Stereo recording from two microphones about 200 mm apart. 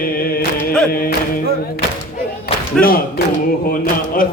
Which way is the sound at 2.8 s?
45° left (ahead or behind).